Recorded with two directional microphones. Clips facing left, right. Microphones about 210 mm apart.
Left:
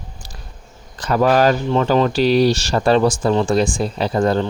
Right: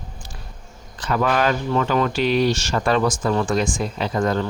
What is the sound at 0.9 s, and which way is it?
Speech, 40° left (ahead or behind).